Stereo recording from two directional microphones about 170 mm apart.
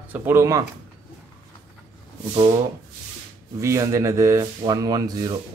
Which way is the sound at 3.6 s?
20° right (ahead or behind).